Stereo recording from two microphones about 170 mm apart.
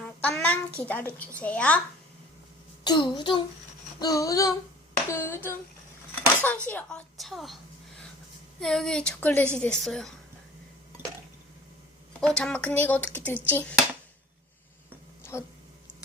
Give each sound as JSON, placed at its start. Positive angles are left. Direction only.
{"t": 0.0, "sound": "a child's voice", "side_deg": 5}
{"t": 2.8, "sound": "a child's voice", "side_deg": 25}
{"t": 8.6, "sound": "speech", "side_deg": 5}
{"t": 12.2, "sound": "a child's voice", "side_deg": 5}
{"t": 15.2, "sound": "a sound", "side_deg": 15}